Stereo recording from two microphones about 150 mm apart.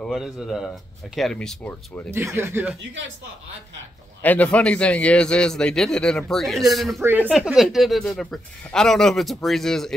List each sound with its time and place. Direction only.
0.0 s speech: centre (ahead or behind)
2.0 s speech: 15° right (ahead or behind)
4.2 s a man's voice: 10° left (ahead or behind)
7.0 s speech: 10° right (ahead or behind)